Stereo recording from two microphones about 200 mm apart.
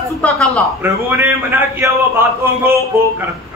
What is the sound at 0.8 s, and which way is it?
A man's voice, 10° right (ahead or behind).